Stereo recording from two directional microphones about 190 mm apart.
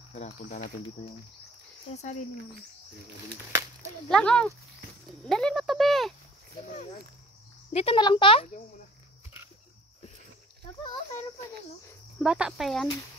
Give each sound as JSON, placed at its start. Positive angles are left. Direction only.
{"t": 0.1, "sound": "speech", "side_deg": 35}
{"t": 1.9, "sound": "speech", "side_deg": 35}
{"t": 4.1, "sound": "speech", "side_deg": 5}
{"t": 7.7, "sound": "speech", "side_deg": 30}
{"t": 12.2, "sound": "speech", "side_deg": -5}